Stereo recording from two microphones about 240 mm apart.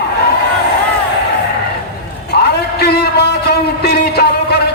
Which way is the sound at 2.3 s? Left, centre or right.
Left.